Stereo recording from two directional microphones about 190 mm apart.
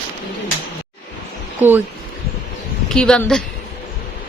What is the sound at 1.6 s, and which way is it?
Speech, 10° right (ahead or behind).